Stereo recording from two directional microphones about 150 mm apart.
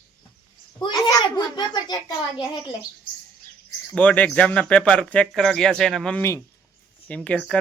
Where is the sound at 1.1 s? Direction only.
30° left (ahead or behind).